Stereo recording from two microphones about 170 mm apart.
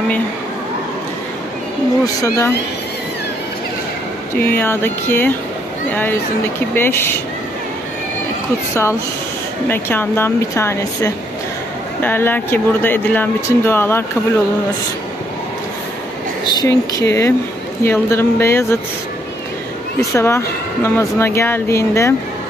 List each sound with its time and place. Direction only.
2.2 s speech: 15° left (ahead or behind)
4.4 s speech: 10° left (ahead or behind)
6.7 s speech: 15° left (ahead or behind)
9.7 s speech: 10° left (ahead or behind)
16.4 s speech: 20° left (ahead or behind)
20.0 s speech: 15° left (ahead or behind)